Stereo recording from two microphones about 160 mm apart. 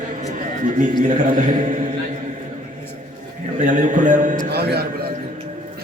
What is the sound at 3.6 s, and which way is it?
Chant, 55° right (ahead or behind).